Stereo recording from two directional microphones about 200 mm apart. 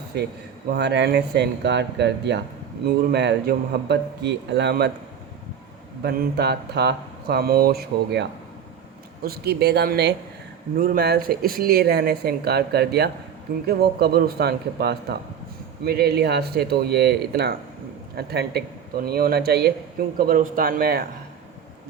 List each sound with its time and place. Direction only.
0.7 s a man's voice: 55° right (ahead or behind)
6.0 s speech: 55° right (ahead or behind)